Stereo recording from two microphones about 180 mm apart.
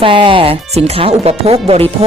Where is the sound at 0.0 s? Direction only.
30° right (ahead or behind).